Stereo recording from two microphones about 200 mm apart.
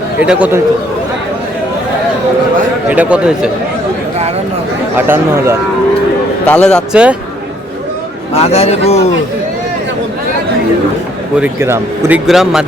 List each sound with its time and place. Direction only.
0.2 s speech: 5° right (ahead or behind)
2.9 s a man's voice: 5° right (ahead or behind)
4.9 s speech: 10° right (ahead or behind)
6.5 s a man's voice: 5° left (ahead or behind)
8.3 s speech: 30° left (ahead or behind)
11.3 s a man's voice: 10° right (ahead or behind)